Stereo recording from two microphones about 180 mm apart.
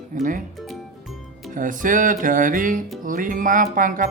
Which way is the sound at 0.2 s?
45° right (ahead or behind).